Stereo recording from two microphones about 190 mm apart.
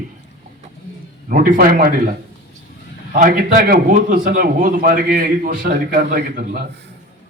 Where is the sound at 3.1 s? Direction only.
45° right (ahead or behind).